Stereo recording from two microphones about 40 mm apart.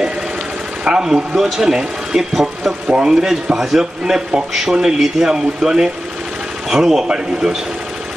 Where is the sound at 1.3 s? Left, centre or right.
Centre.